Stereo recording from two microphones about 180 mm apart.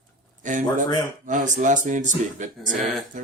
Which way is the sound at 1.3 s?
45° right (ahead or behind).